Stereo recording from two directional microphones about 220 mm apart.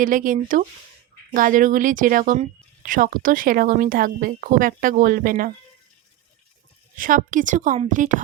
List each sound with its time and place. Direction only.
0.0 s speech: 35° right (ahead or behind)
6.9 s speech: 40° right (ahead or behind)